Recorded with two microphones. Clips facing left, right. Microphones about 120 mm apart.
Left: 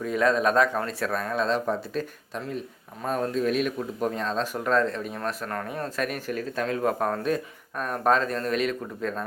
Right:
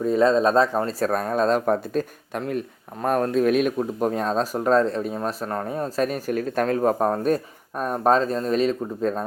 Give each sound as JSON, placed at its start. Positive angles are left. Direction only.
{"t": 0.0, "sound": "speech", "side_deg": -30}
{"t": 5.1, "sound": "speech", "side_deg": -25}
{"t": 6.0, "sound": "speech", "side_deg": -35}
{"t": 7.2, "sound": "speech", "side_deg": -40}